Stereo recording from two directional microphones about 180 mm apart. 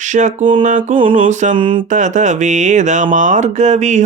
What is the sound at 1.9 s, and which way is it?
Speech, 45° right (ahead or behind).